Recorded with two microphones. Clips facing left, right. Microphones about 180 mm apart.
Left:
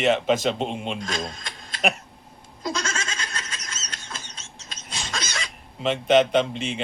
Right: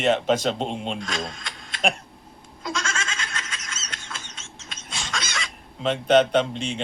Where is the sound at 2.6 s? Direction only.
40° left (ahead or behind).